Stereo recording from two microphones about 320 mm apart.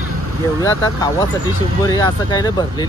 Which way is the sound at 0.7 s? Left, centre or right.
Centre.